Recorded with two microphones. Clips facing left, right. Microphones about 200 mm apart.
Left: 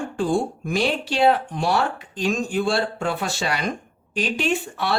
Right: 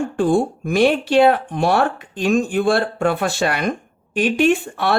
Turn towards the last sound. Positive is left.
turn(degrees=-55)  # may be behind; listen again after turning